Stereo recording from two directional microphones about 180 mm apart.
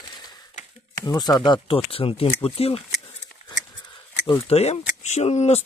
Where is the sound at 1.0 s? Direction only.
20° left (ahead or behind).